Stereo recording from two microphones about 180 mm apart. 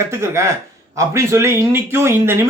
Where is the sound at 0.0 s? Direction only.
15° right (ahead or behind).